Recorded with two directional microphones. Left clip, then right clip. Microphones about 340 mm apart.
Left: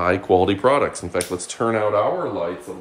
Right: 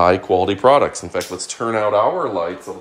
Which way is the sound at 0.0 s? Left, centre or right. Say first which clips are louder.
Right 3 dB; centre.